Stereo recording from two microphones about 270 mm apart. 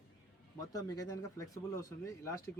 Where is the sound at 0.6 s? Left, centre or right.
Centre.